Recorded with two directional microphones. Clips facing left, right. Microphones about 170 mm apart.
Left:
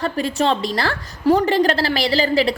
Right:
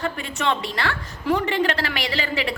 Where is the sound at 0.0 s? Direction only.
35° left (ahead or behind).